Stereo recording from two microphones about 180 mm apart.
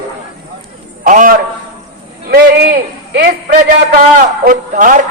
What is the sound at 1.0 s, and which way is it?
Speech, 50° right (ahead or behind).